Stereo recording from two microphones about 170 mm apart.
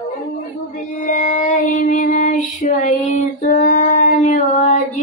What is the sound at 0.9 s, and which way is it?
Child singing, 50° left (ahead or behind).